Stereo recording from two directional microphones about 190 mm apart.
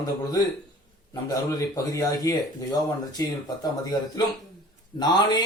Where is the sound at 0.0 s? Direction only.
20° left (ahead or behind).